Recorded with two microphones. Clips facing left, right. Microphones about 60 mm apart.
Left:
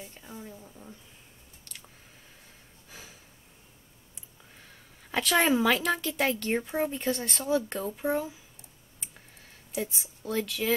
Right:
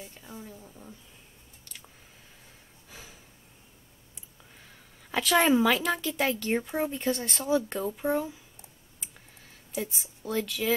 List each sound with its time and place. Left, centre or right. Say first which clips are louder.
0.0 s a woman's voice: even; centre
2.9 s a sound: even; centre
4.6 s a woman's voice: even; centre
9.8 s speech: left 1 dB; centre